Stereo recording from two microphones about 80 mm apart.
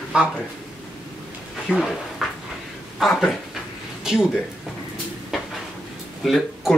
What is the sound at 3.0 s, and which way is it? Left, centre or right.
Speech, centre.